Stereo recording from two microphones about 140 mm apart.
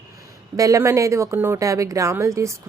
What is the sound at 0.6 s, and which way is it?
Speech, 25° right (ahead or behind).